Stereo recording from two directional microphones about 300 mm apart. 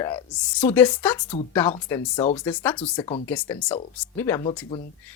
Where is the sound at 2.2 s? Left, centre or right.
Left.